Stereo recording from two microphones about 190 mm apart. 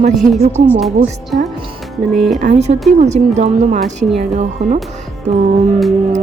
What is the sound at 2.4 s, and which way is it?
Speech, 35° right (ahead or behind).